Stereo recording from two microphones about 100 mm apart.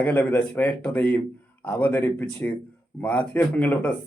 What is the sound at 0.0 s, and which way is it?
Speech, 20° left (ahead or behind).